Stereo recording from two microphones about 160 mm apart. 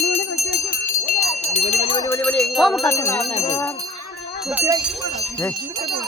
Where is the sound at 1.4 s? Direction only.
45° left (ahead or behind).